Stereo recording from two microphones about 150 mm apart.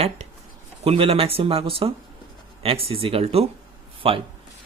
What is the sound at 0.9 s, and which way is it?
Speech, 40° right (ahead or behind).